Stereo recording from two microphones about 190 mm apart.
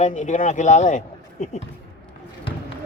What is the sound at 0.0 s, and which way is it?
A man's voice, 40° left (ahead or behind).